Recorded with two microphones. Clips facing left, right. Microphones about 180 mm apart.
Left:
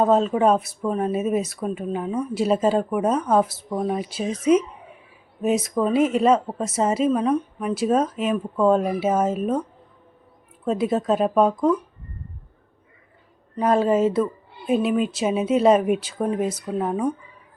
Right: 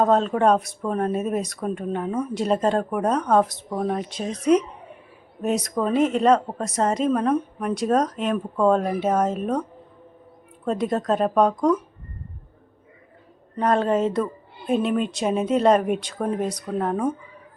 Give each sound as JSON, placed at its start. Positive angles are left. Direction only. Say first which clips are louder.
{"t": 0.0, "sound": "speech", "louder": "left 1 dB", "side_deg": 5}
{"t": 10.7, "sound": "speech", "louder": "left 1 dB", "side_deg": 5}
{"t": 13.6, "sound": "speech", "louder": "left 2 dB", "side_deg": 5}